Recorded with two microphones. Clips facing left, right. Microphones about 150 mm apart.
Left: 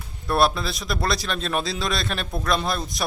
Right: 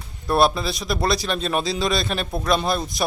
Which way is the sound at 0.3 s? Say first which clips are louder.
Right 2 dB; centre (ahead or behind).